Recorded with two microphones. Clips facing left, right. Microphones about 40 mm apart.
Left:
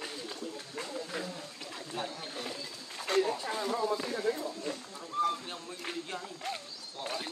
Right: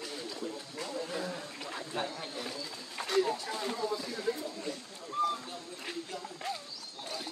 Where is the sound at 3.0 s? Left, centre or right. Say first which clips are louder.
Left 2 dB; right.